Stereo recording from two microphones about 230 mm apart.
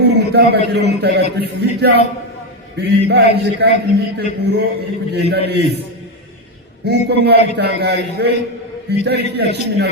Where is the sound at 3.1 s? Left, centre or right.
Right.